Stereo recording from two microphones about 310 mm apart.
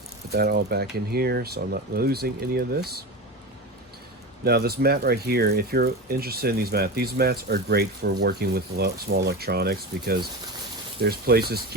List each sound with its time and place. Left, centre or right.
0.3 s speech: right
4.4 s speech: right